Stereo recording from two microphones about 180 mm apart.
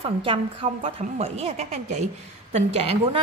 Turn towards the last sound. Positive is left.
turn(degrees=-35)  # may be behind; listen again after turning